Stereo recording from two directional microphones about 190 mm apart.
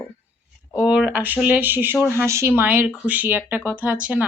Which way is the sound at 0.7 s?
5° right (ahead or behind).